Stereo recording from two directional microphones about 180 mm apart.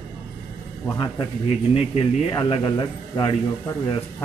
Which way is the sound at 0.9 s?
25° left (ahead or behind).